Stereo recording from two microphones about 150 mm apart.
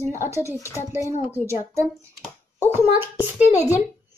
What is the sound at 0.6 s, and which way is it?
Speech, 20° left (ahead or behind).